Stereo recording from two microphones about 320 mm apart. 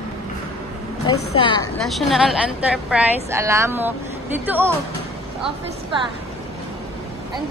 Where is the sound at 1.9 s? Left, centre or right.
Centre.